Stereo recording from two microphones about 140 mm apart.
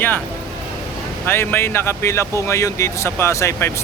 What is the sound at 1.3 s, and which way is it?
Speech, 15° left (ahead or behind).